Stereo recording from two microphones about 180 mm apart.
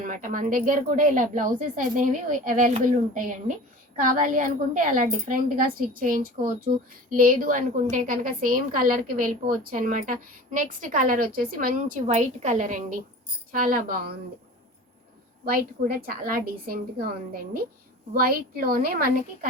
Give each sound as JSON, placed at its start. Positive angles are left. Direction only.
{"t": 0.0, "sound": "a woman's voice", "side_deg": -50}
{"t": 15.4, "sound": "a woman's voice", "side_deg": -55}